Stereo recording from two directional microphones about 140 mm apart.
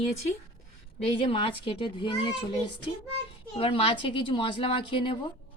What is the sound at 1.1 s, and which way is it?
A woman's voice, 40° left (ahead or behind).